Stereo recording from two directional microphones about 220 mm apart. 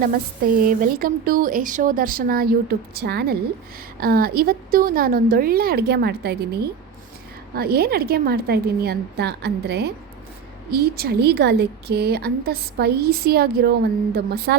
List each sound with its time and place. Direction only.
0.6 s a woman's voice: 40° right (ahead or behind)